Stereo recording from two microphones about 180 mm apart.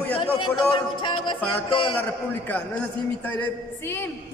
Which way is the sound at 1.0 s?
25° left (ahead or behind).